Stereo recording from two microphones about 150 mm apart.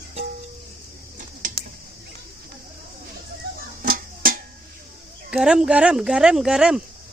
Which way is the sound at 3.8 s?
70° right (ahead or behind).